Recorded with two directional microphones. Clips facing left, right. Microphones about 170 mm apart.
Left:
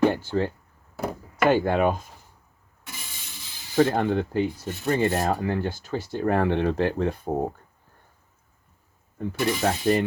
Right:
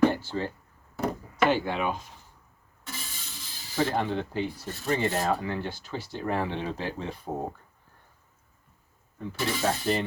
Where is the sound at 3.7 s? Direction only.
55° left (ahead or behind).